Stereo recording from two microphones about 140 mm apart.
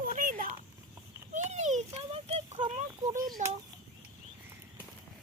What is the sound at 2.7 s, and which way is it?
Speech, 60° right (ahead or behind).